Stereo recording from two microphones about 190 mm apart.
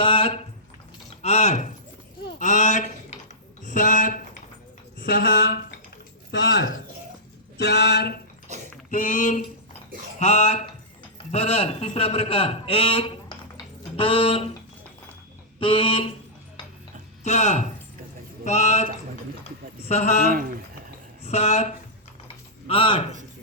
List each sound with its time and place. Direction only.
0.0 s a sound: 25° left (ahead or behind)
1.2 s speech: 35° left (ahead or behind)
2.4 s a sound: 40° left (ahead or behind)
4.9 s speech: 50° left (ahead or behind)
6.3 s speech: 65° left (ahead or behind)
7.6 s a sound: 60° left (ahead or behind)
8.9 s a sound: 45° left (ahead or behind)
10.2 s a man's voice: 35° left (ahead or behind)
15.6 s speech: 25° left (ahead or behind)
17.2 s a man's voice: 35° left (ahead or behind)
19.9 s a man's voice: 35° left (ahead or behind)
21.2 s a man's voice: 35° left (ahead or behind)